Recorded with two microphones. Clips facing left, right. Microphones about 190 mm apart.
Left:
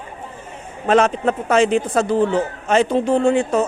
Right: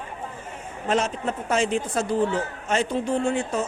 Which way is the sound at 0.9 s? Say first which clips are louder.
Left 9 dB; 75° left (ahead or behind).